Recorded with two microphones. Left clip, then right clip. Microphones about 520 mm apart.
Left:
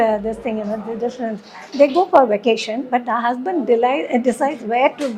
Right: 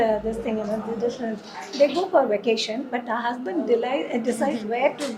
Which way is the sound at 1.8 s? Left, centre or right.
Left.